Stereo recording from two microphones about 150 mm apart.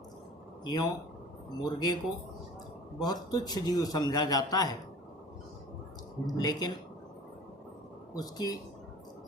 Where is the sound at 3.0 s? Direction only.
25° left (ahead or behind).